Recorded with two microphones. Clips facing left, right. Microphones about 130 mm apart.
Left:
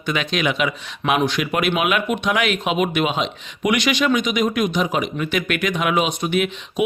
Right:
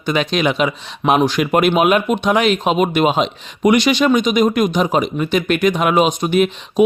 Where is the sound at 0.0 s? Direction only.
35° right (ahead or behind).